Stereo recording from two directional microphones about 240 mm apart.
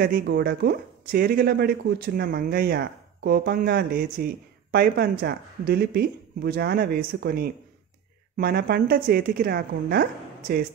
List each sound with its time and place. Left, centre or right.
0.0 s speech: right